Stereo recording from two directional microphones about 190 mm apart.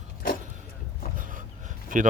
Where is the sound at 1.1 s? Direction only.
45° right (ahead or behind).